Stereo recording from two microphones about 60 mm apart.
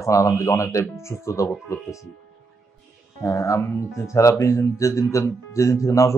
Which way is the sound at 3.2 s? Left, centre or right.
Left.